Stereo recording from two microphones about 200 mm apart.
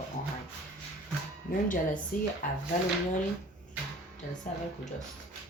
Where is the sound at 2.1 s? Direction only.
45° left (ahead or behind).